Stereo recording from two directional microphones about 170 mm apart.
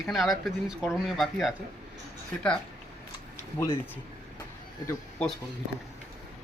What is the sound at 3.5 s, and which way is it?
Speech, 15° left (ahead or behind).